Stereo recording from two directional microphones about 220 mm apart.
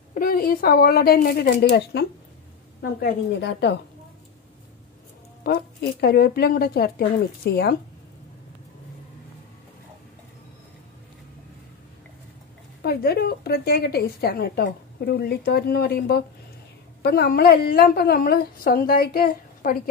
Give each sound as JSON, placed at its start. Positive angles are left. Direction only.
{"t": 0.1, "sound": "a woman's voice", "side_deg": 40}
{"t": 5.4, "sound": "a woman's voice", "side_deg": 45}
{"t": 12.8, "sound": "a woman's voice", "side_deg": 45}